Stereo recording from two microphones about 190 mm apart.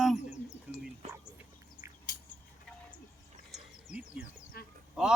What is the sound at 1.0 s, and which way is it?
Speech, 35° right (ahead or behind).